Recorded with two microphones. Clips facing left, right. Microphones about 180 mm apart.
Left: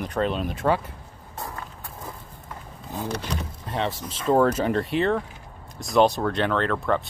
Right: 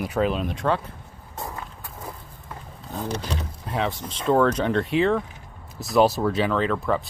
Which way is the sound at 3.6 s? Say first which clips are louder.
Right 1 dB; centre (ahead or behind).